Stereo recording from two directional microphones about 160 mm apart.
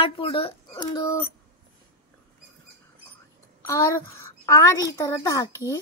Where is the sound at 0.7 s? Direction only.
20° left (ahead or behind).